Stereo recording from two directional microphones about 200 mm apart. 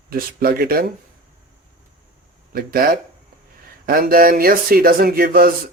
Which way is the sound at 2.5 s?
45° right (ahead or behind).